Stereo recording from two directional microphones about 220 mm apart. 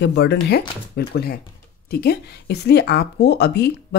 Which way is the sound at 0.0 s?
50° left (ahead or behind).